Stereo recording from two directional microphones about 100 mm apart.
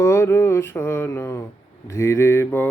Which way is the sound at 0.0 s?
30° left (ahead or behind).